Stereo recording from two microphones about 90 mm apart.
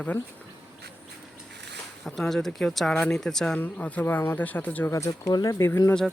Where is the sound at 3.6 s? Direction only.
15° left (ahead or behind).